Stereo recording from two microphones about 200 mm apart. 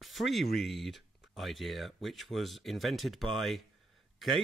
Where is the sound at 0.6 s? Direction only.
Centre (ahead or behind).